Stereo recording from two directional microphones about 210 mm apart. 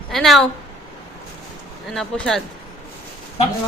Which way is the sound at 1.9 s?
5° left (ahead or behind).